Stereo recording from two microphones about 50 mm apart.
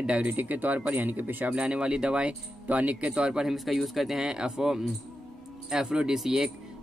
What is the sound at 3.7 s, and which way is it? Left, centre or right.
Speech, centre.